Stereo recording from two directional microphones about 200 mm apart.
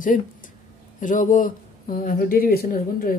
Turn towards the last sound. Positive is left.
turn(degrees=45)  # may be behind; listen again after turning